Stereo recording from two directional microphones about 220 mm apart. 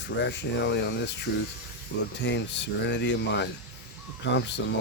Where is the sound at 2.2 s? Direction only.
55° left (ahead or behind).